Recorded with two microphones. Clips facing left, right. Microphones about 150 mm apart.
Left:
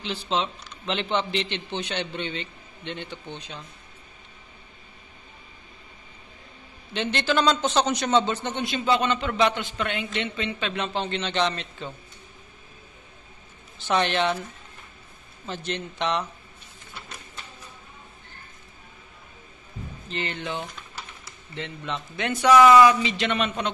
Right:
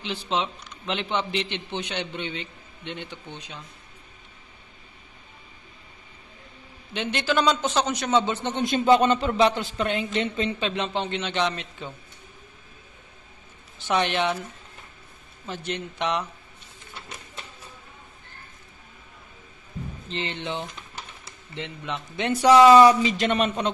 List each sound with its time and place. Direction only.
0.0 s a man's voice: 15° right (ahead or behind)
6.9 s a man's voice: 10° right (ahead or behind)
8.4 s speech: 30° right (ahead or behind)
8.6 s speech: 45° right (ahead or behind)
10.6 s a man's voice: 25° right (ahead or behind)
13.7 s a man's voice: 15° right (ahead or behind)
15.4 s a man's voice: 10° right (ahead or behind)
20.1 s a man's voice: 25° right (ahead or behind)
22.1 s speech: 30° right (ahead or behind)